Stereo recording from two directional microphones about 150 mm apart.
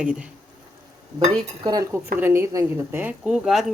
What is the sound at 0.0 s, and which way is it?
Speech, 5° right (ahead or behind).